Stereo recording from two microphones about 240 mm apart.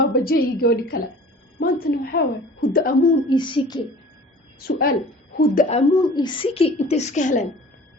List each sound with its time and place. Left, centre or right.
0.0 s a woman's voice: left
3.2 s a woman's voice: centre
4.6 s a woman's voice: left
6.1 s a woman's voice: centre